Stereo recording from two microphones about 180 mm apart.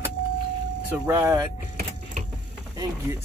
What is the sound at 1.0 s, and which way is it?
Speech, 15° right (ahead or behind).